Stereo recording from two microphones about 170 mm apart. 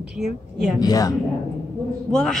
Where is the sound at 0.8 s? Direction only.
20° left (ahead or behind).